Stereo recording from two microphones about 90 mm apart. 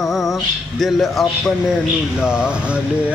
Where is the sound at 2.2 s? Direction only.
10° right (ahead or behind).